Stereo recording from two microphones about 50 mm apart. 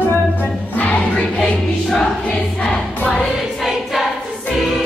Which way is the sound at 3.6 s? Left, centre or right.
Centre.